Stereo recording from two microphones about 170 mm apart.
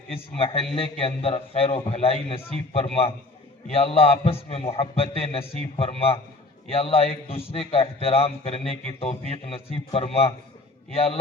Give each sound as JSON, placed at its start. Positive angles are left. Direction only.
{"t": 0.8, "sound": "a man's voice", "side_deg": 35}